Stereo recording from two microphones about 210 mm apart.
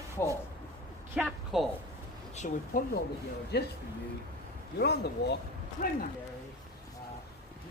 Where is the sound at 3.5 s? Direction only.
50° left (ahead or behind).